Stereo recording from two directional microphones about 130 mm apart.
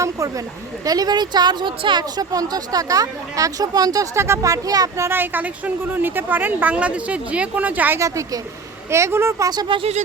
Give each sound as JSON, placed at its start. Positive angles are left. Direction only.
{"t": 0.0, "sound": "speech", "side_deg": -25}
{"t": 9.5, "sound": "speech", "side_deg": -35}